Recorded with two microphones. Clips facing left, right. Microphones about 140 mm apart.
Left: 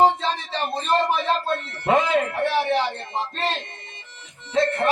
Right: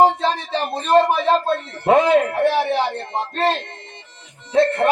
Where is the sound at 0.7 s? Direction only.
60° right (ahead or behind).